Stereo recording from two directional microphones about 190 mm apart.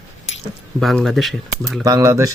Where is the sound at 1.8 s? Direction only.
15° right (ahead or behind).